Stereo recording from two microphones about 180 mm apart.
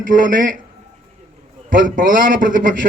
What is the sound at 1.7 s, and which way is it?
A man's voice, 50° right (ahead or behind).